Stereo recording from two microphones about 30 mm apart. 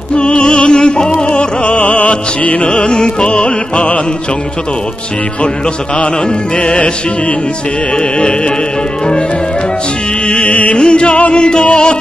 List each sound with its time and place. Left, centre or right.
0.1 s music: left
1.8 s music: left
2.0 s music: left
6.6 s music: left
10.2 s music: left
10.7 s music: left
11.1 s music: left
11.3 s music: left